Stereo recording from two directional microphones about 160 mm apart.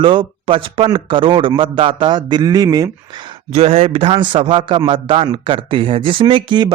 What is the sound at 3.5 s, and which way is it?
A man's voice, 40° right (ahead or behind).